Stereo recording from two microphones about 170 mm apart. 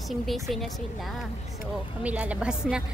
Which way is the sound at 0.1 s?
Centre (ahead or behind).